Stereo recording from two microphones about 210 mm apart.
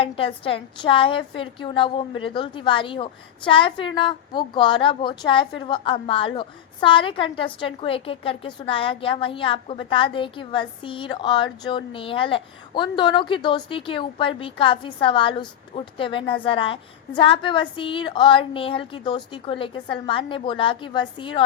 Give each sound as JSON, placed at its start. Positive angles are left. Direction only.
{"t": 0.0, "sound": "a woman's voice", "side_deg": 25}